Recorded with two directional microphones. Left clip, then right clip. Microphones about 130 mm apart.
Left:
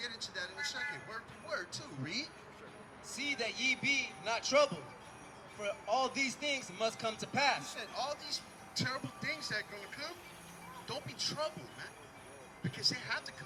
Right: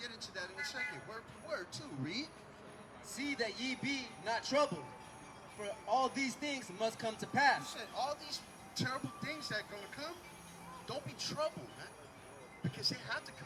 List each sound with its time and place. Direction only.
0.0 s a sound: 20° left (ahead or behind)
3.1 s a man's voice: 20° left (ahead or behind)
7.6 s speech: centre (ahead or behind)
7.9 s a man's voice: 15° left (ahead or behind)